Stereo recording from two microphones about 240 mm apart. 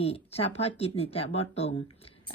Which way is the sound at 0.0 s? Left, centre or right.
Left.